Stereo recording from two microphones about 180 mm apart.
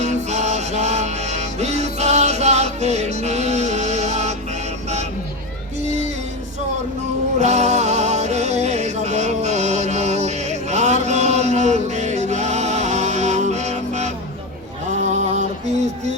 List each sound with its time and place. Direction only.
0.0 s music: 40° right (ahead or behind)
7.3 s music: 40° right (ahead or behind)
15.1 s music: 40° right (ahead or behind)